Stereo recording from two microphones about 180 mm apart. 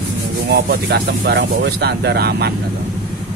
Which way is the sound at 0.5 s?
65° right (ahead or behind).